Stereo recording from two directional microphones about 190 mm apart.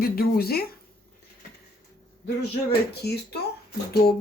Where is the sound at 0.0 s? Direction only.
55° left (ahead or behind).